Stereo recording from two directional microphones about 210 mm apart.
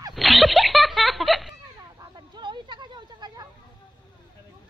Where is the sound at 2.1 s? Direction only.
20° right (ahead or behind).